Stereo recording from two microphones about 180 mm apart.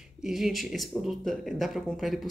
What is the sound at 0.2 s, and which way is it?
Speech, centre (ahead or behind).